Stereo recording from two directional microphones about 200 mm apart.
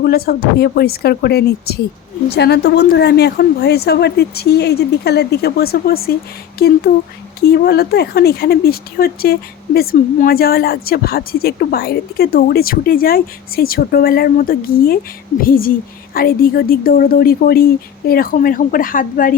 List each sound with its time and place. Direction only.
0.0 s a woman's voice: 50° left (ahead or behind)